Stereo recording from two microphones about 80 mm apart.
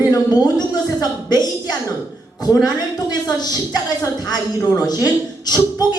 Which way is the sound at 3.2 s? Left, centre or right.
Left.